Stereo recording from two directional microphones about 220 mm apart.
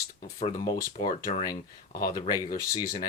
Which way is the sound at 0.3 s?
20° left (ahead or behind).